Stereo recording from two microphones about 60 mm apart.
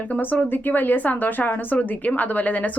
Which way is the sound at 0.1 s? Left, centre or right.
Left.